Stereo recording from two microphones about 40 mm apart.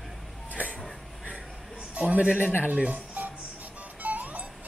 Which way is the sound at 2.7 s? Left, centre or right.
Right.